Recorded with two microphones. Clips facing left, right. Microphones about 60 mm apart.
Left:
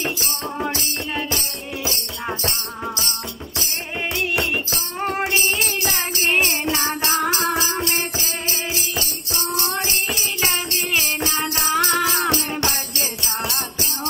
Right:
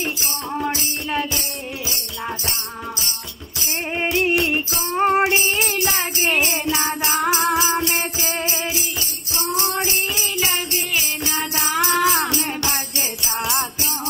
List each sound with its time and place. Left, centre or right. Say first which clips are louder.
4.9 s music: right 6 dB; right
11.2 s music: left 1 dB; right